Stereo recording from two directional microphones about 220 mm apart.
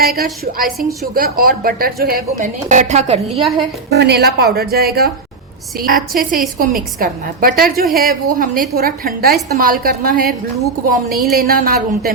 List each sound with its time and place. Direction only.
0.0 s a woman's voice: 45° right (ahead or behind)
3.8 s a woman's voice: 50° right (ahead or behind)
5.9 s a woman's voice: 40° right (ahead or behind)